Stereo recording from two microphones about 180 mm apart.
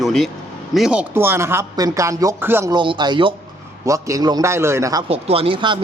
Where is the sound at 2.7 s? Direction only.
25° right (ahead or behind).